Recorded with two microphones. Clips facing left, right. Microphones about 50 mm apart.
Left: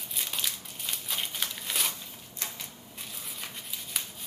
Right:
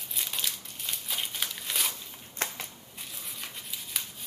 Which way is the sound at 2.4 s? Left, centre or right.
Right.